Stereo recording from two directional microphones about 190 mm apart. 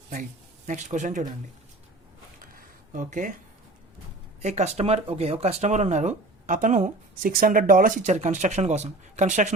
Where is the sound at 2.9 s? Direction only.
45° right (ahead or behind).